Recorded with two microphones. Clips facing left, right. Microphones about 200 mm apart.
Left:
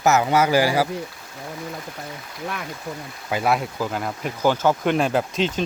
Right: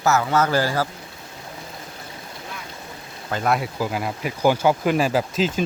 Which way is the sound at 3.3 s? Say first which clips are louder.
Left 1 dB; 10° left (ahead or behind).